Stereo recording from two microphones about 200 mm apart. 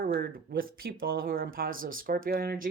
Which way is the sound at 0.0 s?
45° right (ahead or behind).